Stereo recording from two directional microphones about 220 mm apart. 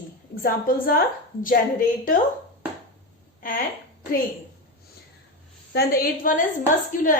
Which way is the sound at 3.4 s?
40° left (ahead or behind).